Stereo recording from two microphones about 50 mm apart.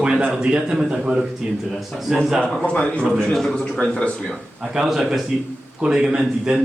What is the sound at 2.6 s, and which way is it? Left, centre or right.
Speech, left.